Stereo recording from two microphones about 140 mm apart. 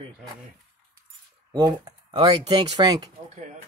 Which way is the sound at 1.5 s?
25° right (ahead or behind).